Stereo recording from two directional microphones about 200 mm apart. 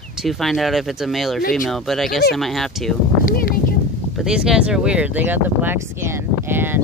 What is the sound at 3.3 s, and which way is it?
Speech, 45° left (ahead or behind).